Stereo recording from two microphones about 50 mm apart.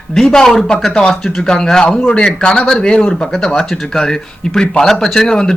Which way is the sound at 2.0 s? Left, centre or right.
Left.